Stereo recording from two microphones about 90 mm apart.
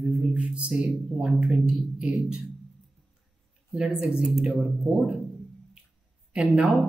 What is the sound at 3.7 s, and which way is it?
Mantra, 10° right (ahead or behind).